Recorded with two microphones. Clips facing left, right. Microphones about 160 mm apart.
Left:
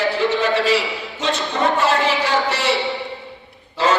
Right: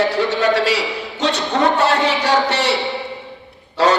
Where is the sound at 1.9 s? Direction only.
70° right (ahead or behind).